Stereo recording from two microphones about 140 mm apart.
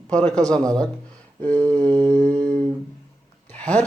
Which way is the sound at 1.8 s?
30° right (ahead or behind).